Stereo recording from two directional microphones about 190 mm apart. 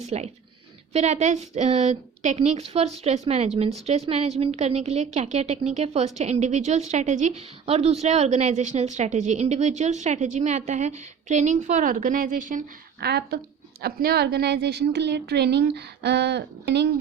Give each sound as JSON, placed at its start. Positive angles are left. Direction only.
{"t": 0.0, "sound": "a woman's voice", "side_deg": -35}